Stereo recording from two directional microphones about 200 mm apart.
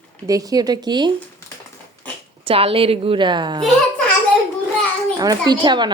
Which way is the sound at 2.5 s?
30° right (ahead or behind).